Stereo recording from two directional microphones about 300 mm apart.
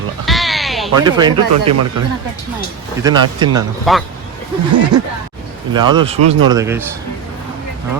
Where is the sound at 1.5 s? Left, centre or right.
Right.